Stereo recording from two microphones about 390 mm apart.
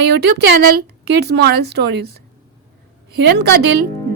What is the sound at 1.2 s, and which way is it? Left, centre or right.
Speech, right.